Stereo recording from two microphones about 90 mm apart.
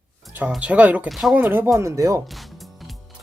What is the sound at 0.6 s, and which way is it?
Speech, 15° right (ahead or behind).